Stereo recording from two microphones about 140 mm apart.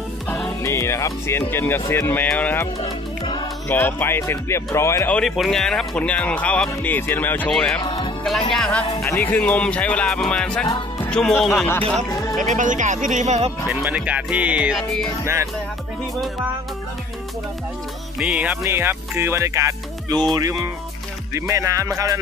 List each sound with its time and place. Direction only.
0.7 s speech: 20° left (ahead or behind)
2.8 s music: 35° left (ahead or behind)
3.6 s speech: 15° left (ahead or behind)
5.1 s speech: centre (ahead or behind)
7.8 s music: 35° left (ahead or behind)
8.5 s speech: 5° left (ahead or behind)
12.1 s music: 25° left (ahead or behind)
12.4 s speech: 65° right (ahead or behind)
13.7 s speech: 10° right (ahead or behind)
18.2 s speech: 10° right (ahead or behind); by 20.2 s 25° right (ahead or behind)
21.3 s music: 20° right (ahead or behind)